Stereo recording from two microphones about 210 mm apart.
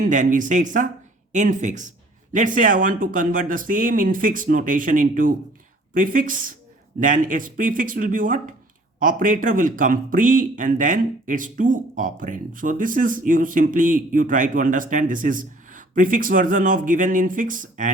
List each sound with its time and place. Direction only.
0.0 s speech: 40° right (ahead or behind)